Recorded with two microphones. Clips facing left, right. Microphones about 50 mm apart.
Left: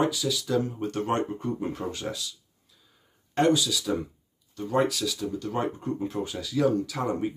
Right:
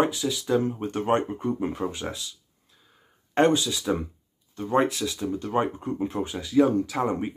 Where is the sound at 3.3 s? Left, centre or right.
Right.